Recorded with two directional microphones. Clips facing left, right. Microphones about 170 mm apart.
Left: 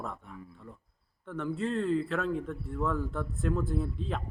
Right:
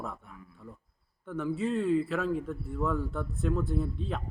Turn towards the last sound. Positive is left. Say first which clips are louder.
# right 1 dB
turn(degrees=0)  # may be behind; listen again after turning